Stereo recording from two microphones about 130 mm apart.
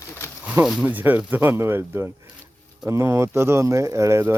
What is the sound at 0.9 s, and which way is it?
Speech, 15° right (ahead or behind).